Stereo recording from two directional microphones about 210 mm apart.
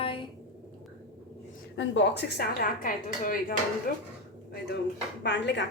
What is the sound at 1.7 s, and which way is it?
A woman's voice, 60° left (ahead or behind).